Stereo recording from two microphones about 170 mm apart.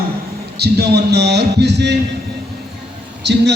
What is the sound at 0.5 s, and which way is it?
A man's voice, 75° right (ahead or behind).